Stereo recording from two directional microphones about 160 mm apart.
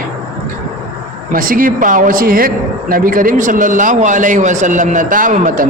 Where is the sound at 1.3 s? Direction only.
60° right (ahead or behind).